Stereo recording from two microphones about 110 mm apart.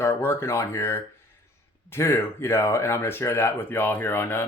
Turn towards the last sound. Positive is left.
turn(degrees=20)  # may be behind; listen again after turning